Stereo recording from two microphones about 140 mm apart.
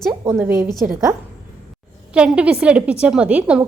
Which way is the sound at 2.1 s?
5° right (ahead or behind).